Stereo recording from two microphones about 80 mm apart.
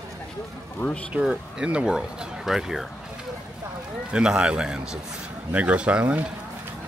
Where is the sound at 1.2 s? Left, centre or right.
Centre.